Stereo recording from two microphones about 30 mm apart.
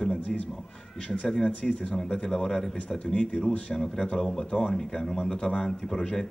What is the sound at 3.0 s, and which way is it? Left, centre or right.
Speech, left.